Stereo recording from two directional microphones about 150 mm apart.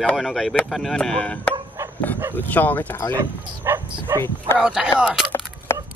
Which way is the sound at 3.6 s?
15° right (ahead or behind).